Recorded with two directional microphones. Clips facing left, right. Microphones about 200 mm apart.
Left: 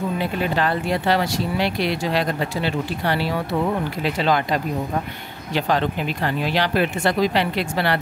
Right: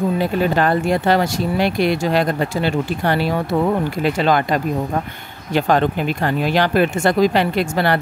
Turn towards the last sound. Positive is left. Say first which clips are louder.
# right 4 dB
turn(degrees=-45)  # may be behind; listen again after turning